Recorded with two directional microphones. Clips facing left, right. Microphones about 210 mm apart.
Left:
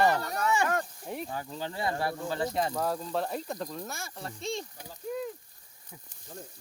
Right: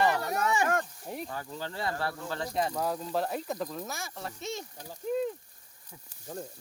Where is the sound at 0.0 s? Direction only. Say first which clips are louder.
Left 1 dB; 40° left (ahead or behind).